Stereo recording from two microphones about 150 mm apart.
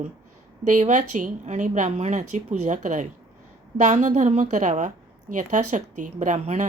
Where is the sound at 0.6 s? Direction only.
55° right (ahead or behind).